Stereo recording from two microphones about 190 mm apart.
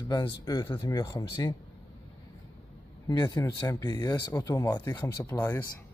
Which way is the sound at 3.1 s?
20° left (ahead or behind).